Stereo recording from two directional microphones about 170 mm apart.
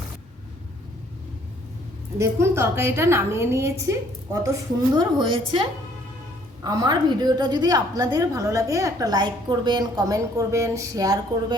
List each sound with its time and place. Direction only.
2.1 s a woman's voice: 15° right (ahead or behind)
6.7 s a woman's voice: 25° right (ahead or behind)